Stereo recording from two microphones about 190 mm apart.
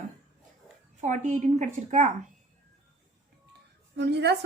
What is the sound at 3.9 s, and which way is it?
Speech, 65° right (ahead or behind).